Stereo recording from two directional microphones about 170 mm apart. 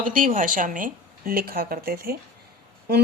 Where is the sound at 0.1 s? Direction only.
50° right (ahead or behind).